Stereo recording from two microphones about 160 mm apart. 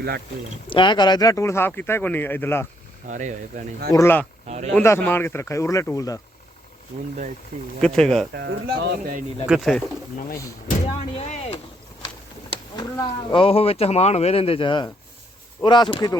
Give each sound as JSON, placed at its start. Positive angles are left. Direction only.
{"t": 0.7, "sound": "speech", "side_deg": 30}
{"t": 3.1, "sound": "speech", "side_deg": -50}
{"t": 3.9, "sound": "speech", "side_deg": 15}
{"t": 4.4, "sound": "speech", "side_deg": -45}
{"t": 4.7, "sound": "speech", "side_deg": 15}
{"t": 7.8, "sound": "speech", "side_deg": 5}
{"t": 8.4, "sound": "speech", "side_deg": -90}
{"t": 9.5, "sound": "speech", "side_deg": 0}
{"t": 10.2, "sound": "speech", "side_deg": 60}
{"t": 11.2, "sound": "speech", "side_deg": 40}
{"t": 12.7, "sound": "speech", "side_deg": 30}